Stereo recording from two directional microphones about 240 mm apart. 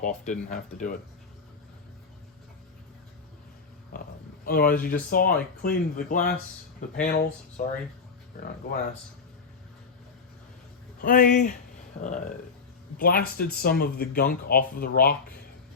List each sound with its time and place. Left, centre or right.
0.0 s speech: left
3.9 s a sound: left
4.4 s speech: left
8.7 s speech: left
11.0 s speech: left
13.0 s speech: left